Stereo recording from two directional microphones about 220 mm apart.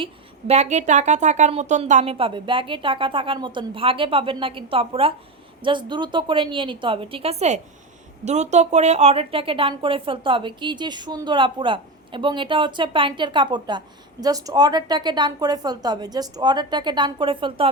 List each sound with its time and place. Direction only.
0.0 s a woman's voice: 30° right (ahead or behind)